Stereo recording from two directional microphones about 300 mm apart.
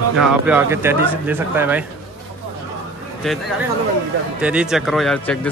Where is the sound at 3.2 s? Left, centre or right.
Centre.